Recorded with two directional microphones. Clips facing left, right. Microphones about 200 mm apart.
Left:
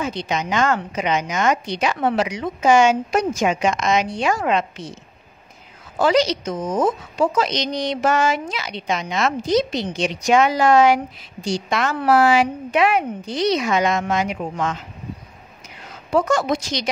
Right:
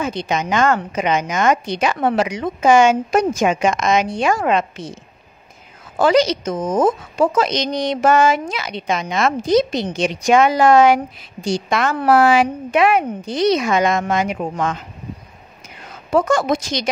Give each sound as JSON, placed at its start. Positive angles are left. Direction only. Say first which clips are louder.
{"t": 0.0, "sound": "a woman's voice", "louder": "right 3 dB", "side_deg": -50}
{"t": 5.9, "sound": "a woman's voice", "louder": "right 3 dB", "side_deg": -50}
{"t": 16.1, "sound": "a woman's voice", "louder": "right 2 dB", "side_deg": -55}